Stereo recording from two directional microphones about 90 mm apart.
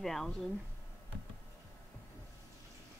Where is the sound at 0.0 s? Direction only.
5° left (ahead or behind).